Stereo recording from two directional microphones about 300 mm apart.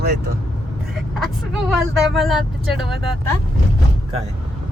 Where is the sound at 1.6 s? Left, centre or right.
Centre.